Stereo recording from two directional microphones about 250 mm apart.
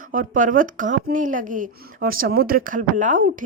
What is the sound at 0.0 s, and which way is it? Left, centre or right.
Speech, right.